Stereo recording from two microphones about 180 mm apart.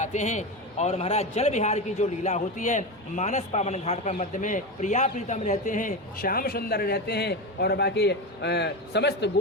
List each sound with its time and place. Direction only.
0.0 s a man's voice: 40° left (ahead or behind); by 9.3 s 70° left (ahead or behind)